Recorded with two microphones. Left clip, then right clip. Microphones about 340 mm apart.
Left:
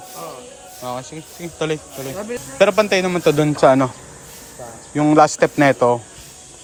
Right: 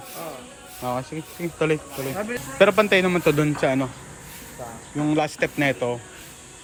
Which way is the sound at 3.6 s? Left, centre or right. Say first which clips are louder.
Left 12 dB; left.